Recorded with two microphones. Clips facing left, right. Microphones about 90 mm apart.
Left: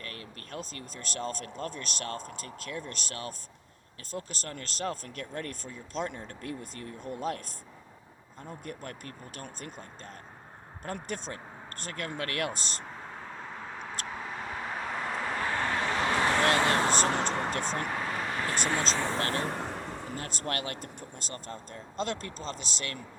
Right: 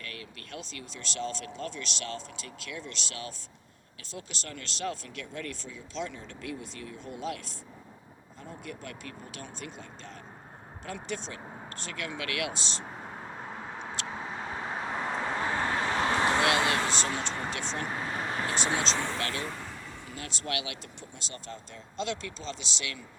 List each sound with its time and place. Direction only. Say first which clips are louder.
0.0 s speech: even; 40° left (ahead or behind)
8.6 s speech: even; 45° left (ahead or behind)
10.8 s speech: left 1 dB; 50° left (ahead or behind)
14.1 s vehicle: right 1 dB; 25° right (ahead or behind)
15.9 s vehicle: right 1 dB; 30° right (ahead or behind)
16.6 s vehicle: left 3 dB; 40° left (ahead or behind)
17.5 s speech: left 2 dB; 45° left (ahead or behind)
18.0 s vehicle: even; 30° right (ahead or behind)
18.4 s vehicle: even; 45° left (ahead or behind)
19.1 s speech: left 3 dB; 40° left (ahead or behind)
19.5 s speech: left 5 dB; 65° left (ahead or behind); by 23.0 s 45° left (ahead or behind)